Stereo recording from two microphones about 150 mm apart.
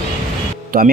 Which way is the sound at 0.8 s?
90° right.